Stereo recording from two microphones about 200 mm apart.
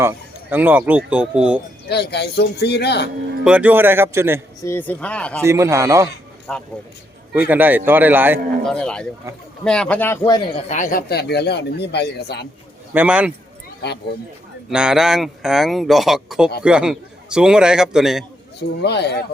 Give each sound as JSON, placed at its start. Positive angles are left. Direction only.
{"t": 0.5, "sound": "speech", "side_deg": -10}
{"t": 1.9, "sound": "speech", "side_deg": 55}
{"t": 3.4, "sound": "speech", "side_deg": -5}
{"t": 4.6, "sound": "speech", "side_deg": 10}
{"t": 5.4, "sound": "speech", "side_deg": -15}
{"t": 6.5, "sound": "speech", "side_deg": 5}
{"t": 7.3, "sound": "speech", "side_deg": -10}
{"t": 8.6, "sound": "speech", "side_deg": 5}
{"t": 10.2, "sound": "speech", "side_deg": 20}
{"t": 10.7, "sound": "speech", "side_deg": 40}
{"t": 12.9, "sound": "speech", "side_deg": -5}
{"t": 14.7, "sound": "speech", "side_deg": -5}
{"t": 18.8, "sound": "speech", "side_deg": 55}